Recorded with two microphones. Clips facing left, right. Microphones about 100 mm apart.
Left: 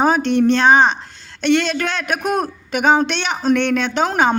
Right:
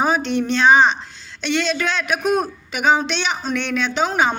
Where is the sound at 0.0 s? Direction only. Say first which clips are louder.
Left 5 dB; 55° left (ahead or behind).